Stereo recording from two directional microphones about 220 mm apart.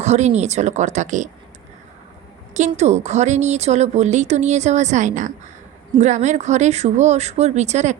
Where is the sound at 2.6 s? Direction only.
30° right (ahead or behind).